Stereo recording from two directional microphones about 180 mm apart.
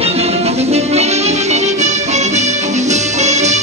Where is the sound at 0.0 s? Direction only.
35° right (ahead or behind).